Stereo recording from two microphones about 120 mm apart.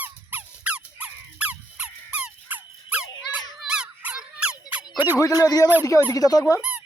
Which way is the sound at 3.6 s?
5° right (ahead or behind).